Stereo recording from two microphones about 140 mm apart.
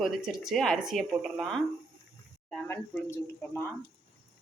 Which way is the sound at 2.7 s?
15° left (ahead or behind).